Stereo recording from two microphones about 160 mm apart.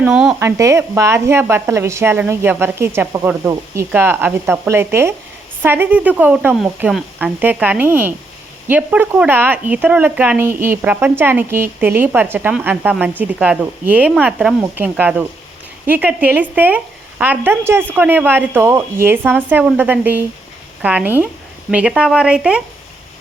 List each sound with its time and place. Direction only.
0.0 s a woman's voice: 5° right (ahead or behind)
0.3 s a woman's voice: 15° right (ahead or behind)